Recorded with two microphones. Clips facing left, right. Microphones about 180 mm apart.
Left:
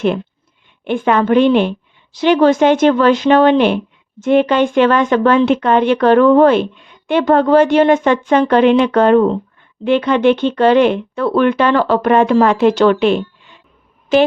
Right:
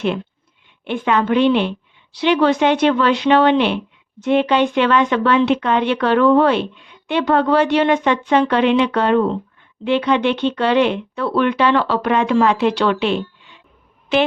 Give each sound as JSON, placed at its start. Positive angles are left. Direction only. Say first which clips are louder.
{"t": 0.9, "sound": "speech", "louder": "left 4 dB", "side_deg": 45}